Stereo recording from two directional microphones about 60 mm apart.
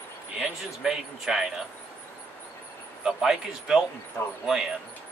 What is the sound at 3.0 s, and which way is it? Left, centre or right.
Speech, centre.